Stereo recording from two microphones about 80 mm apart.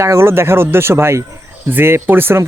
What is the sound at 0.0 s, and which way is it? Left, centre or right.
Speech, right.